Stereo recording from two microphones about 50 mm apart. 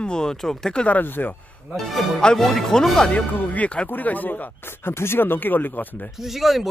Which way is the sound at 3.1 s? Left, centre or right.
Left.